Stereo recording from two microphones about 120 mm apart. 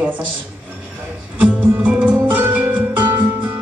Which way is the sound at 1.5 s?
15° right (ahead or behind).